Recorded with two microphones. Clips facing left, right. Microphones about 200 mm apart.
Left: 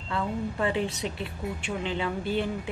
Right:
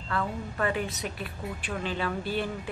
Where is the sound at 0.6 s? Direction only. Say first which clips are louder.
Even; 25° left (ahead or behind).